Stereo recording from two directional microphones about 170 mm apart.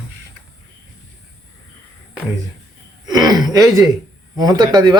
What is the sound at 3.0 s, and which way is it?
Speech, 25° right (ahead or behind).